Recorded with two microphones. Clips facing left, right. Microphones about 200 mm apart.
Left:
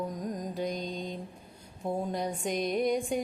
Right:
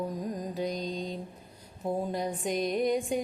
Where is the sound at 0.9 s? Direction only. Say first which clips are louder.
Right 2 dB; 50° left (ahead or behind).